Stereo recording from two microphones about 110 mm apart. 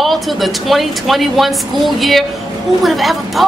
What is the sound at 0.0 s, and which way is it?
A woman's voice, centre (ahead or behind).